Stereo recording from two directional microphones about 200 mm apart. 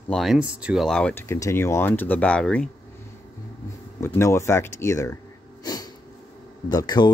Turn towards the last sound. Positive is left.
turn(degrees=20)  # may be behind; listen again after turning